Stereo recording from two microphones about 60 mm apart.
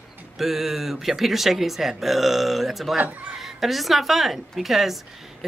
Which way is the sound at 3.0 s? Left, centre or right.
Right.